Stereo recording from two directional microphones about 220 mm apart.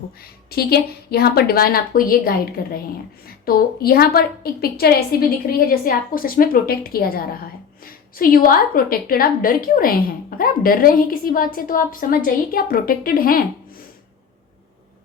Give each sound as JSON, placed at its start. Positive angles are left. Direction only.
{"t": 0.2, "sound": "a woman's voice", "side_deg": 45}